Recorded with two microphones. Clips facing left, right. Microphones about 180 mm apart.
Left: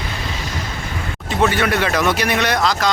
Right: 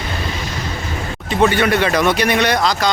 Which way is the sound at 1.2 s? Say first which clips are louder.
Right 3 dB; centre (ahead or behind).